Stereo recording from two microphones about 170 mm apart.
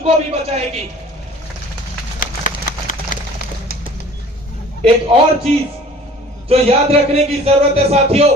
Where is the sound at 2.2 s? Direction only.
50° left (ahead or behind).